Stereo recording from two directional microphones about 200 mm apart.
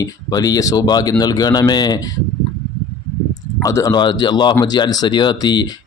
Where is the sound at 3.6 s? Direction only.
15° left (ahead or behind).